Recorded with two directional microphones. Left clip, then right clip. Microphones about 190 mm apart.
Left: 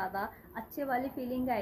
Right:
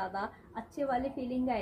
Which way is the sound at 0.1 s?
5° right (ahead or behind).